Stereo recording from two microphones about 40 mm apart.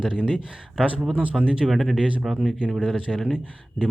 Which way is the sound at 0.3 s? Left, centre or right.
Right.